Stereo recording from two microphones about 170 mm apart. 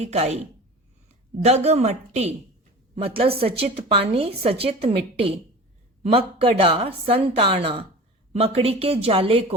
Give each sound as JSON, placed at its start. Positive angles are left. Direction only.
{"t": 0.0, "sound": "a woman's voice", "side_deg": -40}
{"t": 1.5, "sound": "a woman's voice", "side_deg": -40}